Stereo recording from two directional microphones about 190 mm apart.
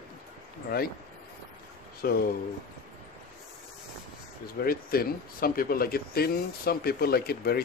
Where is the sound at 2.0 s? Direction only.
55° left (ahead or behind).